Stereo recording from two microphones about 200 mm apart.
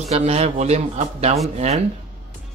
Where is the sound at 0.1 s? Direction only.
30° right (ahead or behind).